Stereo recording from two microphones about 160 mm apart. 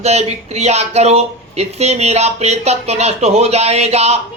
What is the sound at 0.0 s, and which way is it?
A woman's voice, 40° right (ahead or behind).